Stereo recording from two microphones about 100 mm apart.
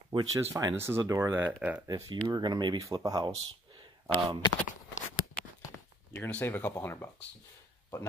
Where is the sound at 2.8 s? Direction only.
35° right (ahead or behind).